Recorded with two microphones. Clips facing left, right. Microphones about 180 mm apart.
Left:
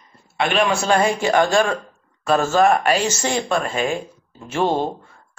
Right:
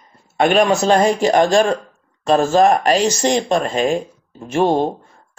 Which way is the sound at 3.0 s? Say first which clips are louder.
Right 5 dB; 15° right (ahead or behind).